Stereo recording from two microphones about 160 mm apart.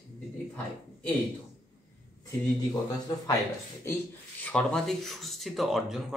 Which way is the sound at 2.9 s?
20° left (ahead or behind).